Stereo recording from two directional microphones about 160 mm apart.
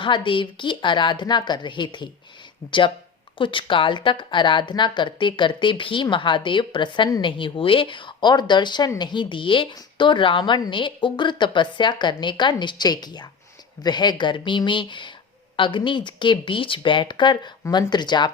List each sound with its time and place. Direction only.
0.0 s speech: 30° left (ahead or behind)
3.3 s speech: 30° left (ahead or behind)